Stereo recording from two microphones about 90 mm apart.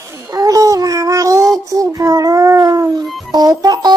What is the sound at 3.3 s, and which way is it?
Speech, 50° right (ahead or behind).